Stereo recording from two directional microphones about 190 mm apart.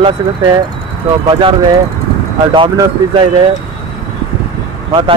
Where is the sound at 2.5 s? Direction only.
20° right (ahead or behind).